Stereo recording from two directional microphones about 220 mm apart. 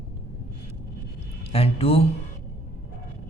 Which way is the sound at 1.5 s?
25° left (ahead or behind).